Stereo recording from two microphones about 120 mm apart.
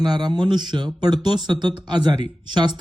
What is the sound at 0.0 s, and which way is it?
Speech, 35° right (ahead or behind).